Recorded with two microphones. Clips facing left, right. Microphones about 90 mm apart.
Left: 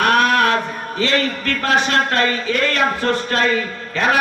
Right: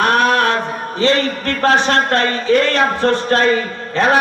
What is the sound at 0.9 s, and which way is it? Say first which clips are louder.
A man's voice: right 4 dB; 25° right (ahead or behind).